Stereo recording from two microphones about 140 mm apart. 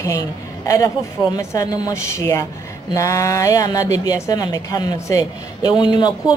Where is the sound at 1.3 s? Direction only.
25° left (ahead or behind).